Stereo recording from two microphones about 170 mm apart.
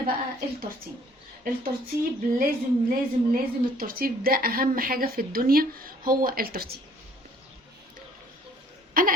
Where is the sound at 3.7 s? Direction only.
60° right (ahead or behind).